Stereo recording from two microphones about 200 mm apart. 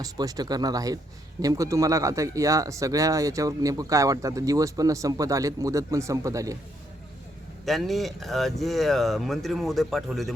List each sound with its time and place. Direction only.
0.0 s speech: 20° right (ahead or behind)
7.6 s speech: centre (ahead or behind)